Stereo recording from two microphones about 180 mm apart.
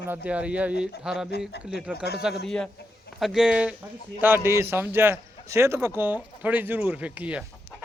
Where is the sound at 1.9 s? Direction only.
65° left (ahead or behind).